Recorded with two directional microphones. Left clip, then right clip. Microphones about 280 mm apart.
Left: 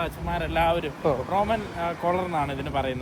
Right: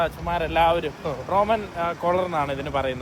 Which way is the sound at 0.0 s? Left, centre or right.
Centre.